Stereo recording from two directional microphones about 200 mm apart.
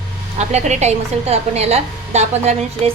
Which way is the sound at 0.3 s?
35° right (ahead or behind).